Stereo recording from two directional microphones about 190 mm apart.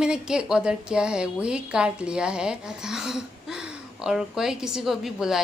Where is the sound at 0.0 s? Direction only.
5° right (ahead or behind).